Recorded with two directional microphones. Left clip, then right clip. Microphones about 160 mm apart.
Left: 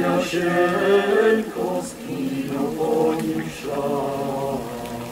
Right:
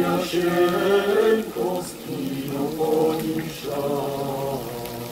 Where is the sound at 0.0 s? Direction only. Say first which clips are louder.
Left 1 dB; 35° left (ahead or behind).